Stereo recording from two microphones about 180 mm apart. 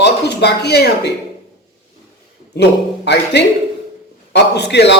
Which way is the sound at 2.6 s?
65° left (ahead or behind).